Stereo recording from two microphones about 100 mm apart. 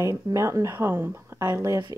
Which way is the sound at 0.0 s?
30° right (ahead or behind).